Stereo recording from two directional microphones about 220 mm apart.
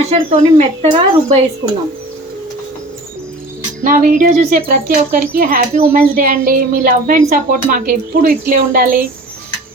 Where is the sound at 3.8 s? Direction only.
35° right (ahead or behind).